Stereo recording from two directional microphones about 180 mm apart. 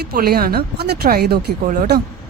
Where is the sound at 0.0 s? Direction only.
60° right (ahead or behind).